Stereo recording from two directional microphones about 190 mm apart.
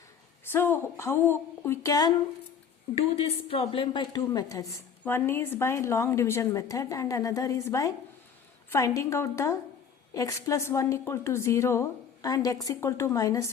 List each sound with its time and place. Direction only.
0.5 s a woman's voice: 10° left (ahead or behind)
2.9 s a woman's voice: 30° left (ahead or behind)